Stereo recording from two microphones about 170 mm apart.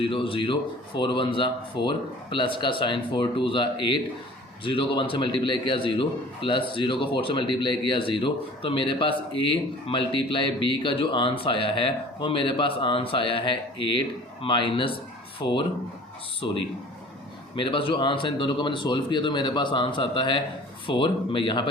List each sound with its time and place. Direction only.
0.0 s a man's voice: 30° left (ahead or behind)
16.4 s a man's voice: 25° left (ahead or behind)